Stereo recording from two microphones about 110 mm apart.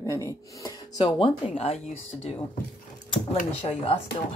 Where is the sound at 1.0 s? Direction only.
50° left (ahead or behind).